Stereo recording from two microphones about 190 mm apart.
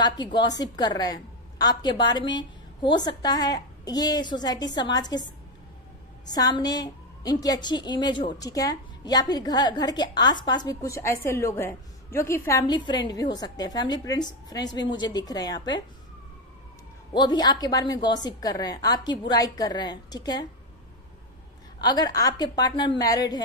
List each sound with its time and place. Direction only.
0.0 s a woman's voice: 25° left (ahead or behind)
6.3 s a woman's voice: 20° left (ahead or behind)
17.1 s a woman's voice: 20° left (ahead or behind)
21.8 s a woman's voice: 20° left (ahead or behind)